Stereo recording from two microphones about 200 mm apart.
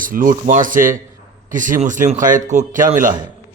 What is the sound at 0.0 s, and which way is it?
A man's voice, 45° right (ahead or behind).